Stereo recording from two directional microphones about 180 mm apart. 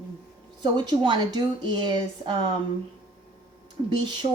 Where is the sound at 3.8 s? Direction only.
25° right (ahead or behind).